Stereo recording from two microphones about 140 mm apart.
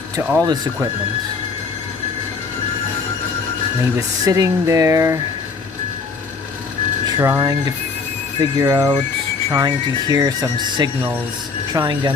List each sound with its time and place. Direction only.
0.2 s speech: 15° right (ahead or behind)
0.4 s speech: 30° right (ahead or behind)
3.9 s speech: 25° right (ahead or behind)
7.2 s speech: 20° right (ahead or behind)